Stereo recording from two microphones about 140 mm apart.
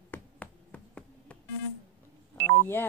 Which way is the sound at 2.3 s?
15° left (ahead or behind).